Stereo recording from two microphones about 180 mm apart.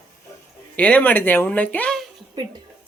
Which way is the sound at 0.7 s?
10° left (ahead or behind).